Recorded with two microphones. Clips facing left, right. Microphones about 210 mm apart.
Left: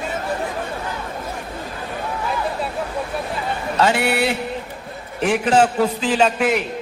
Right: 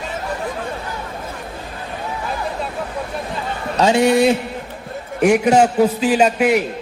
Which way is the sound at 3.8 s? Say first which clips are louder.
Right 5 dB; 15° right (ahead or behind).